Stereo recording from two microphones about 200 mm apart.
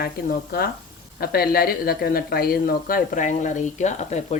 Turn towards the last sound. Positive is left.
turn(degrees=35)  # may be behind; listen again after turning